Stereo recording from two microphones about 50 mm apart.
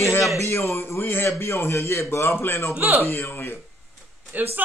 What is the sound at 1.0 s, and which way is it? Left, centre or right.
Speech, left.